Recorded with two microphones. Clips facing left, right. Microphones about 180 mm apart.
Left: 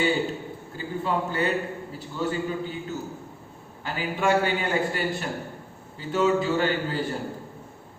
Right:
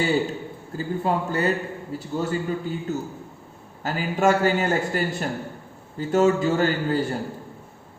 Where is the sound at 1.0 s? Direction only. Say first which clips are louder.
Right 2 dB; 40° right (ahead or behind).